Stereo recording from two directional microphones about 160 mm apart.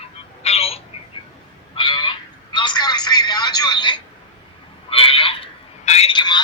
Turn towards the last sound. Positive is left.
turn(degrees=30)  # may be behind; listen again after turning